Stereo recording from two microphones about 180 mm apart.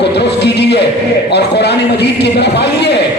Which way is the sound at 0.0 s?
70° left (ahead or behind).